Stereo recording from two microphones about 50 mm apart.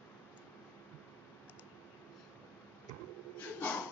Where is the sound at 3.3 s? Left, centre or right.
Left.